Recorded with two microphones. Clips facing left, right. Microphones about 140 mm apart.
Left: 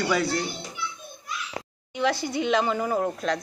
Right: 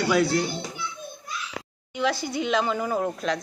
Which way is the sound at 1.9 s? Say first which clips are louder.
Left 1 dB; 25° left (ahead or behind).